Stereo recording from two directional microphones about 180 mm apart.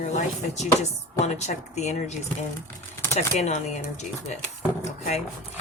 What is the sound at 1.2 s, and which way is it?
Speech, 40° left (ahead or behind).